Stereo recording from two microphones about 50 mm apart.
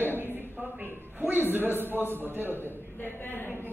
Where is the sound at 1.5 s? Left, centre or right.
Right.